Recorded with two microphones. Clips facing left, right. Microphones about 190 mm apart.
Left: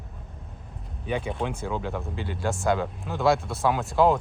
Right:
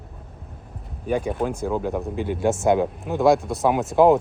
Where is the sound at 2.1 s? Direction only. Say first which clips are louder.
Right 8 dB; 55° right (ahead or behind).